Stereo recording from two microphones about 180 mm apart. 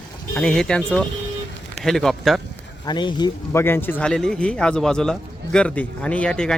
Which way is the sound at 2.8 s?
25° left (ahead or behind).